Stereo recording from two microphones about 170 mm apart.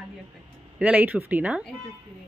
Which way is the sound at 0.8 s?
10° right (ahead or behind).